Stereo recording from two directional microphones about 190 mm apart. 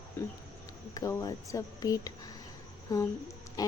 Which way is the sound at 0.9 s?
15° left (ahead or behind).